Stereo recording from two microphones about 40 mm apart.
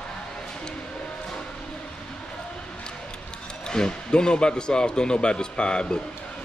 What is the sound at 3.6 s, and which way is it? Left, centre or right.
Speech, centre.